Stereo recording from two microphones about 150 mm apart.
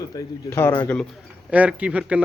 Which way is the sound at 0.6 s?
15° left (ahead or behind).